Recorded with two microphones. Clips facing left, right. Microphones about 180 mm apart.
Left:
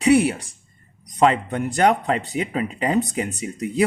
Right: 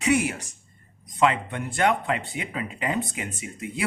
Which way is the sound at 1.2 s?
40° left (ahead or behind).